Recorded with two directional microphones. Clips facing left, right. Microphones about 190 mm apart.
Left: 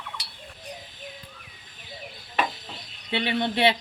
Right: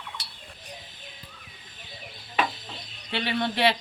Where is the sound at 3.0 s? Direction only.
20° left (ahead or behind).